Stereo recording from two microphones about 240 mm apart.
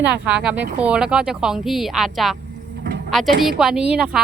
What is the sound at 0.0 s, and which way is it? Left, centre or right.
Speech, centre.